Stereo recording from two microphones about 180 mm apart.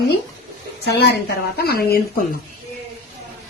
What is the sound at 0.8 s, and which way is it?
A woman's voice, 60° left (ahead or behind).